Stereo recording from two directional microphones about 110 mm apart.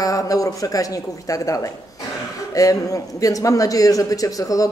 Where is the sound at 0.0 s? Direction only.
30° left (ahead or behind).